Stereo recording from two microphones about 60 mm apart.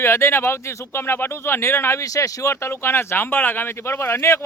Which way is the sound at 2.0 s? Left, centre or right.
Left.